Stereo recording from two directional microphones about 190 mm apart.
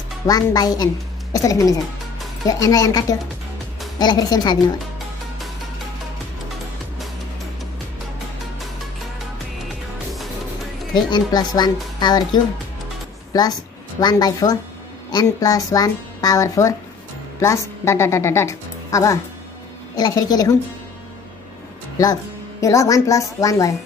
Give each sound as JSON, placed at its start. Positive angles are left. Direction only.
{"t": 0.3, "sound": "a woman's voice", "side_deg": 20}
{"t": 11.0, "sound": "speech", "side_deg": 20}
{"t": 13.3, "sound": "a woman's voice", "side_deg": 20}
{"t": 21.9, "sound": "speech", "side_deg": 20}